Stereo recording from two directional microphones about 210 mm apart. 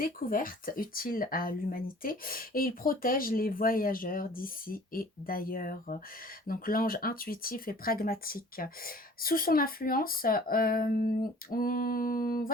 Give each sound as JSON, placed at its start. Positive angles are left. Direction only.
{"t": 0.0, "sound": "speech", "side_deg": 40}